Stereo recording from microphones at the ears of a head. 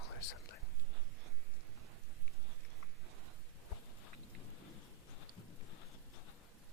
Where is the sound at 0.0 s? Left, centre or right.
Left.